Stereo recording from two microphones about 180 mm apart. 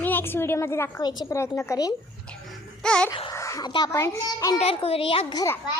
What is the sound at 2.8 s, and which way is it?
Speech, 5° left (ahead or behind).